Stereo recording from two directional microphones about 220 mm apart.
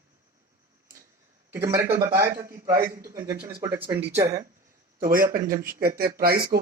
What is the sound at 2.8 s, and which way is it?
Speech, 40° right (ahead or behind).